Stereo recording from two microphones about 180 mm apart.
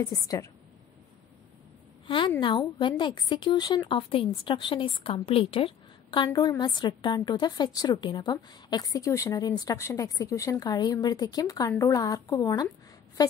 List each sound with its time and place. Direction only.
0.0 s a woman's voice: 20° left (ahead or behind)
2.0 s a woman's voice: 30° left (ahead or behind)